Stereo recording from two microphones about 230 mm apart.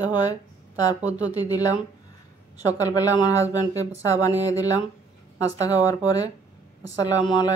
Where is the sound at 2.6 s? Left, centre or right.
Centre.